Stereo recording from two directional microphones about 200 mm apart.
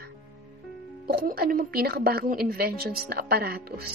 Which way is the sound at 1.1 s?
50° right (ahead or behind).